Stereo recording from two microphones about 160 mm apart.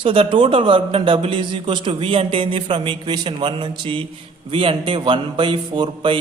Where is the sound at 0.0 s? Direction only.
35° right (ahead or behind).